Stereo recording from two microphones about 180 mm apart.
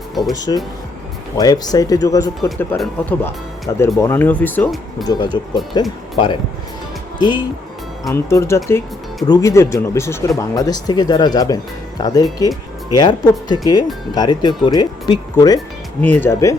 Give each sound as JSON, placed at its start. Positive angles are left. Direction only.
{"t": 0.1, "sound": "speech", "side_deg": 0}
{"t": 0.3, "sound": "speech", "side_deg": 20}
{"t": 2.7, "sound": "speech", "side_deg": 0}
{"t": 3.7, "sound": "speech", "side_deg": 15}
{"t": 5.0, "sound": "speech", "side_deg": 25}
{"t": 8.1, "sound": "speech", "side_deg": 15}
{"t": 16.0, "sound": "speech", "side_deg": 10}